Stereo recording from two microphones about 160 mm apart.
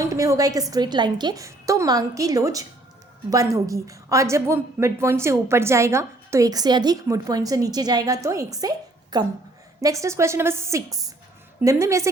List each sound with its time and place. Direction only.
0.0 s a woman's voice: 20° right (ahead or behind)